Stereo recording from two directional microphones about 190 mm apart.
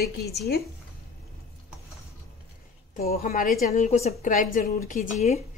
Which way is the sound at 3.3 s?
45° left (ahead or behind).